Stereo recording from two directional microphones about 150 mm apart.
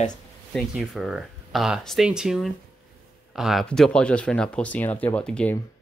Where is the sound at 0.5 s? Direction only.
5° right (ahead or behind).